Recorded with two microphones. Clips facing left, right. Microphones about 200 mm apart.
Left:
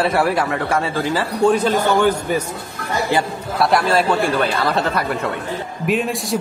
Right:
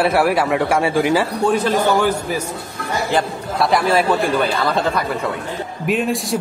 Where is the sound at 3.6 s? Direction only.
Centre (ahead or behind).